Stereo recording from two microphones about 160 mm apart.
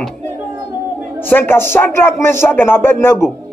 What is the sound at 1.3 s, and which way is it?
Speech, 15° left (ahead or behind).